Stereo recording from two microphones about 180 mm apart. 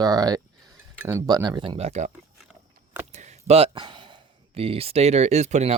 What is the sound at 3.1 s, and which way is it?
Speech, 40° right (ahead or behind).